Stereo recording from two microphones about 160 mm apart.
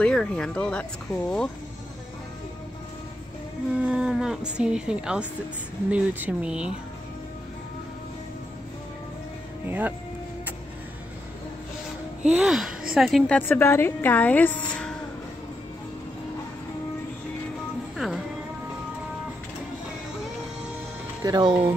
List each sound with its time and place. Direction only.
0.0 s speech: 5° left (ahead or behind)
3.8 s speech: 5° right (ahead or behind)
9.7 s speech: 10° right (ahead or behind)
12.3 s speech: 5° right (ahead or behind)
13.4 s a woman's voice: 15° left (ahead or behind)
17.9 s music: centre (ahead or behind)
21.2 s speech: 25° right (ahead or behind)